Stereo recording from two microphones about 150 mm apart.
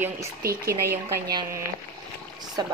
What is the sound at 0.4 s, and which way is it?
Speech, 80° right.